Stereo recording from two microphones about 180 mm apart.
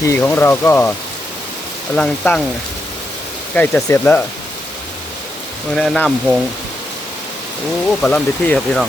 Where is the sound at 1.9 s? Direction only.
5° left (ahead or behind).